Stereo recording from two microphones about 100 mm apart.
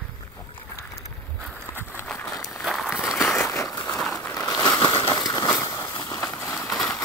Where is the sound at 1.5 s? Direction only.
20° left (ahead or behind).